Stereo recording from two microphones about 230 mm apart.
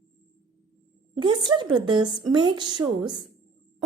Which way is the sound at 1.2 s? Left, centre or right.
Centre.